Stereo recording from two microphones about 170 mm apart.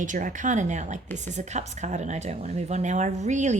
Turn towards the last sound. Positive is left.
turn(degrees=-45)  # may be behind; listen again after turning